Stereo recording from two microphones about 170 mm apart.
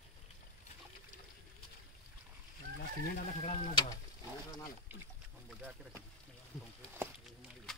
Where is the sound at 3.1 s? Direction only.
50° left (ahead or behind).